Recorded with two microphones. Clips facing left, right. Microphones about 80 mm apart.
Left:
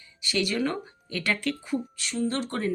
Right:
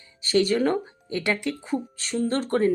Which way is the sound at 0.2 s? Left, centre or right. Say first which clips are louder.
Right 6 dB; right.